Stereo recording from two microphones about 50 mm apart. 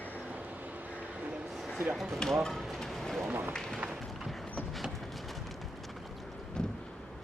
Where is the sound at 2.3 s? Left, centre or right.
Centre.